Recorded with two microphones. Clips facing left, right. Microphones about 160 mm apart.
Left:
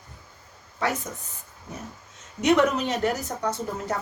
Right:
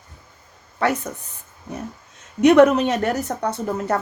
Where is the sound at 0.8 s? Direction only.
65° right (ahead or behind).